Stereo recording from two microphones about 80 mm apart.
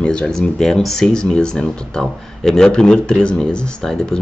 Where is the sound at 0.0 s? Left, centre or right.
Centre.